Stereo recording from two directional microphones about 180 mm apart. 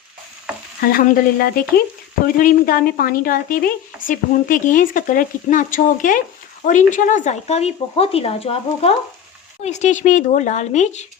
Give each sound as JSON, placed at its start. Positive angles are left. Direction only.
{"t": 0.8, "sound": "speech", "side_deg": 55}